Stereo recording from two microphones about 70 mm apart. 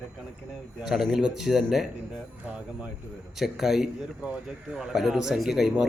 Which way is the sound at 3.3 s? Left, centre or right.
Centre.